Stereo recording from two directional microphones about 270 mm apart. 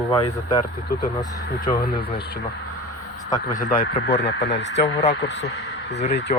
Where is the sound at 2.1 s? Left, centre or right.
Left.